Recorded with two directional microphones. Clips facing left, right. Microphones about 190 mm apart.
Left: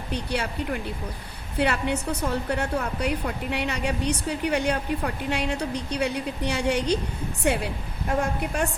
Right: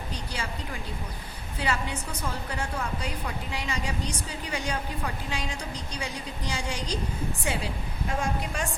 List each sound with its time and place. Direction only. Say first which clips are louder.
0.1 s a woman's voice: left 9 dB; 65° left (ahead or behind)